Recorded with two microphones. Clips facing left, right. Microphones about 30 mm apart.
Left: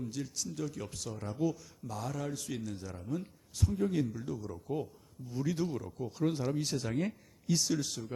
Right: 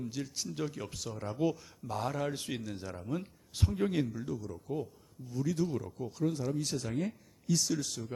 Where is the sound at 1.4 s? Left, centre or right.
Right.